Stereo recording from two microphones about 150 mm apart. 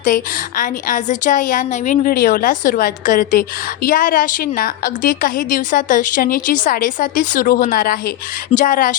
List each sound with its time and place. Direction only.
0.0 s a woman's voice: 65° left (ahead or behind)